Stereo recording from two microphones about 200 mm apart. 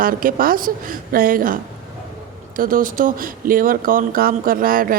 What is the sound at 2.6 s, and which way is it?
Speech, 45° right (ahead or behind).